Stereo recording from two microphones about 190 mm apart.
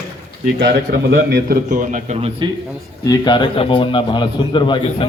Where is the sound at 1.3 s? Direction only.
50° right (ahead or behind).